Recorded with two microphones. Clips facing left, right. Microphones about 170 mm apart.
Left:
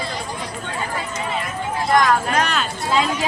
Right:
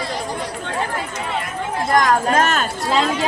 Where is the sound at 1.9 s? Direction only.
45° right (ahead or behind).